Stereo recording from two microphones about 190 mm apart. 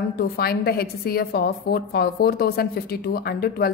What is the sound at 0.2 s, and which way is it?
A woman's voice, 55° left (ahead or behind).